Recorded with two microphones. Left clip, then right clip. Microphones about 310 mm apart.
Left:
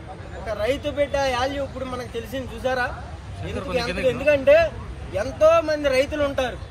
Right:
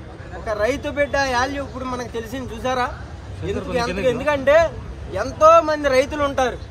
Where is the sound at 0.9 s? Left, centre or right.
Right.